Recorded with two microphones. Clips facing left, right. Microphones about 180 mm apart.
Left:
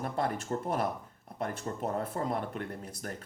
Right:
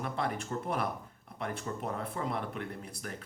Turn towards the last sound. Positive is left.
turn(degrees=40)  # may be behind; listen again after turning